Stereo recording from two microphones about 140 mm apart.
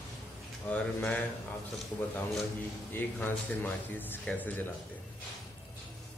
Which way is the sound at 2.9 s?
15° left (ahead or behind).